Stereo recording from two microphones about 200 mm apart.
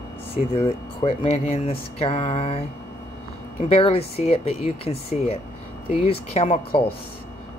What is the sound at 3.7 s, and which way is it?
Speech, 30° left (ahead or behind).